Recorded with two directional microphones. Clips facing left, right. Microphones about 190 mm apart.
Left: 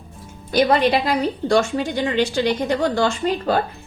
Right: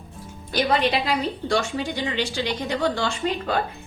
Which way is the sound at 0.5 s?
45° left (ahead or behind).